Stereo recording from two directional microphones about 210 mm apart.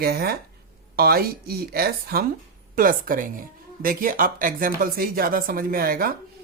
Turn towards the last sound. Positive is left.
turn(degrees=-45)  # may be behind; listen again after turning